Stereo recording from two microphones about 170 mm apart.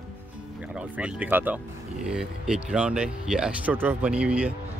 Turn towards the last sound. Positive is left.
turn(degrees=-5)  # may be behind; listen again after turning